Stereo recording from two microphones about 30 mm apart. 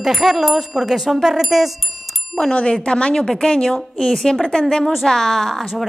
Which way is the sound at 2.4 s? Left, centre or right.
Left.